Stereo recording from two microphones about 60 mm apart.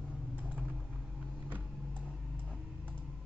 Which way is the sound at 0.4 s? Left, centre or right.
Right.